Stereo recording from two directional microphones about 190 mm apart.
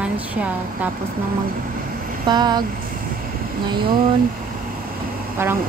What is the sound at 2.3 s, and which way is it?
Speech, 20° right (ahead or behind).